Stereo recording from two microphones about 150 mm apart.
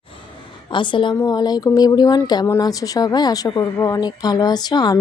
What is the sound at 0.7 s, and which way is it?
A woman's voice, 35° left (ahead or behind).